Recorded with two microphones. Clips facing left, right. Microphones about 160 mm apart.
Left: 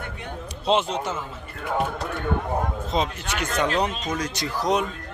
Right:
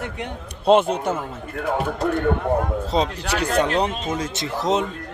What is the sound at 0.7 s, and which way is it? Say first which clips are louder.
Speech: right 6 dB; 55° right (ahead or behind).